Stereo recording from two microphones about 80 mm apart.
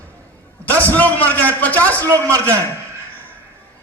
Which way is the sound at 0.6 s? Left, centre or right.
Left.